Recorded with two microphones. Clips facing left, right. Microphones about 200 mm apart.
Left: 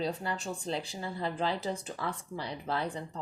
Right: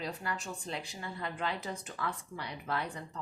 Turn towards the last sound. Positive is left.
turn(degrees=25)  # may be behind; listen again after turning